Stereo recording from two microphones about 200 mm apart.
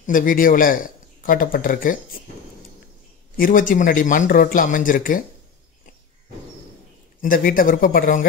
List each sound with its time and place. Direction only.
0.0 s a man's voice: 45° left (ahead or behind)
3.3 s speech: 45° left (ahead or behind)
7.2 s speech: 45° left (ahead or behind)